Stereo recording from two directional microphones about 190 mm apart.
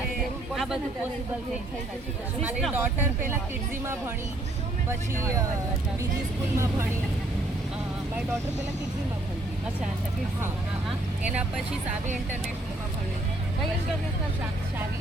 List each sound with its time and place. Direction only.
0.5 s a sound: centre (ahead or behind)
2.4 s speech: 5° right (ahead or behind)
5.2 s speech: 15° right (ahead or behind)
6.6 s speech: 15° right (ahead or behind)
11.2 s speech: 5° right (ahead or behind)